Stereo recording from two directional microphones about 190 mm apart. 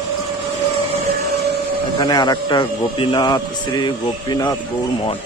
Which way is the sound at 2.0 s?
20° left (ahead or behind).